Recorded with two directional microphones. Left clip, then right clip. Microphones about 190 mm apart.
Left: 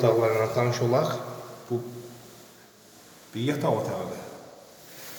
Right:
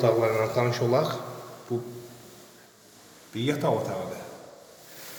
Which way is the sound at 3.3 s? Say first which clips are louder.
Even; 15° right (ahead or behind).